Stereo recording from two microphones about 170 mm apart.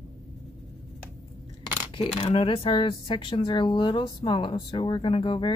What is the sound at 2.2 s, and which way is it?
Speech, 30° left (ahead or behind).